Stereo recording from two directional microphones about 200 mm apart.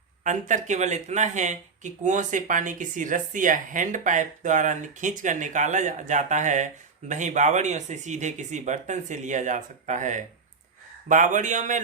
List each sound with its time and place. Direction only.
0.3 s speech: 40° right (ahead or behind)